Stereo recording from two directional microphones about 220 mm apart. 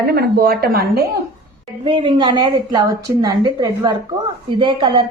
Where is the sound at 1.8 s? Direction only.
25° right (ahead or behind).